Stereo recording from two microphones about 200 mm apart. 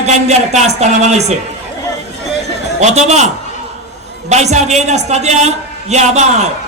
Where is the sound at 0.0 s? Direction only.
35° right (ahead or behind).